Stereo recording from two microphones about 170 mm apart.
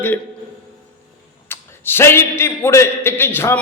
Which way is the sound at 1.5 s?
15° left (ahead or behind).